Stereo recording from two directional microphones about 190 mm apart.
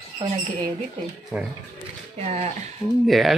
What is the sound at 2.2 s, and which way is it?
Speech, 35° right (ahead or behind).